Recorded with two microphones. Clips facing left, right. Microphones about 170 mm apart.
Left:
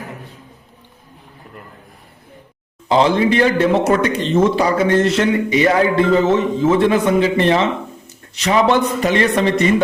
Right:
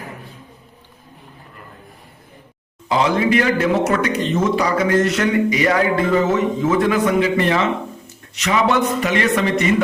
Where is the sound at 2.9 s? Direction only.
30° left (ahead or behind).